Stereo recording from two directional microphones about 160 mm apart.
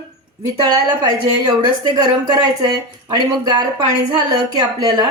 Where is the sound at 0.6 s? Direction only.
25° right (ahead or behind).